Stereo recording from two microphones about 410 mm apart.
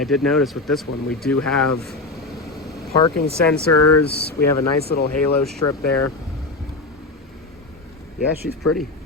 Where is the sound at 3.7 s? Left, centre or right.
Left.